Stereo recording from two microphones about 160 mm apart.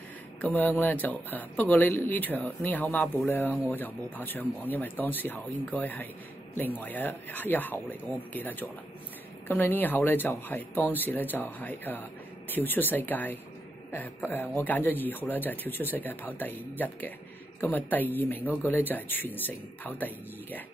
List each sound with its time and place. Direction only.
0.6 s speech: 10° left (ahead or behind)